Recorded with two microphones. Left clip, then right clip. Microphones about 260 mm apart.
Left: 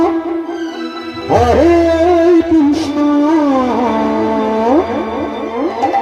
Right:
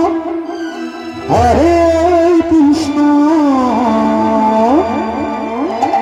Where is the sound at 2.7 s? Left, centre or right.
Right.